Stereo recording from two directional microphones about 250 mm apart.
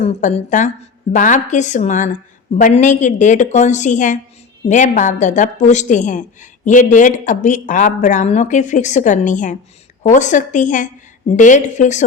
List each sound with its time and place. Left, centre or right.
0.0 s speech: left